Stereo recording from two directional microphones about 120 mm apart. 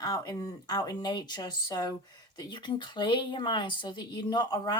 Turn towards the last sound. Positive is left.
turn(degrees=35)  # may be behind; listen again after turning